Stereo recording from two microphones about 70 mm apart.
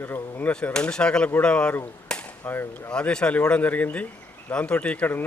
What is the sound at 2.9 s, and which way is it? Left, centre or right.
A man's voice, centre.